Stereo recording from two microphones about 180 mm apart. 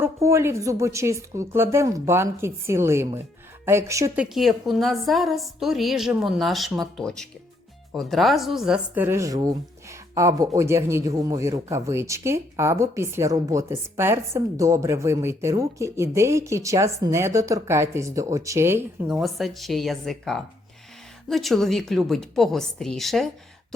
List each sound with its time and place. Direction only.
0.0 s speech: 15° right (ahead or behind)
4.2 s a woman's voice: centre (ahead or behind)
19.0 s a woman's voice: centre (ahead or behind)